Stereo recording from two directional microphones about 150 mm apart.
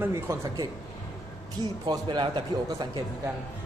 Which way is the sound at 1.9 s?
30° right (ahead or behind).